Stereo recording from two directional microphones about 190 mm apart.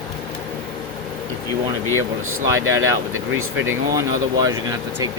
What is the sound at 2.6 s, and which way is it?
Speech, 90° right.